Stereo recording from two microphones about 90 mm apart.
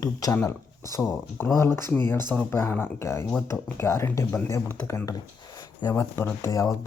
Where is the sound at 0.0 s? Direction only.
40° left (ahead or behind); by 5.0 s 20° left (ahead or behind).